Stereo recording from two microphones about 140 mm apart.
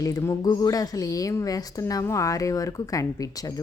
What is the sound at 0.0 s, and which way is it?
A woman's voice, 25° left (ahead or behind).